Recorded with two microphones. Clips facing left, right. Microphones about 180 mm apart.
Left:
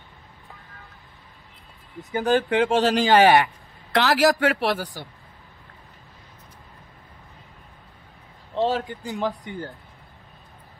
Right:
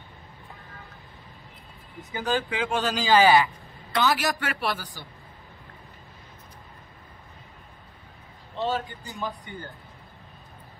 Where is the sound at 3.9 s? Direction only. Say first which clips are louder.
Left 6 dB; 90° left; by 4.8 s 75° left (ahead or behind).